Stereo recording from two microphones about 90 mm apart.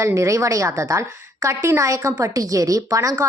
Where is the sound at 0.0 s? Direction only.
35° right (ahead or behind).